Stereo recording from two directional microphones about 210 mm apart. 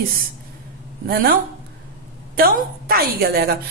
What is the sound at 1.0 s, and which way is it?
A woman's voice, 45° right (ahead or behind).